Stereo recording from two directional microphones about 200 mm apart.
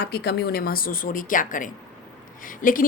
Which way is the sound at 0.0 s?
55° left (ahead or behind).